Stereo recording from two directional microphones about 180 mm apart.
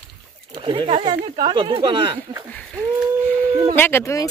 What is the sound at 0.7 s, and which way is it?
Speech, 30° right (ahead or behind).